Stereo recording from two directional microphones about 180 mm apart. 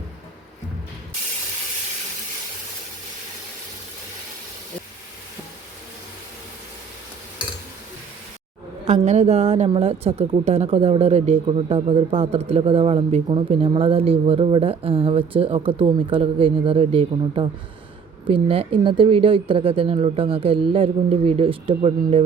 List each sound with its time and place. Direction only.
8.8 s a woman's voice: 40° right (ahead or behind)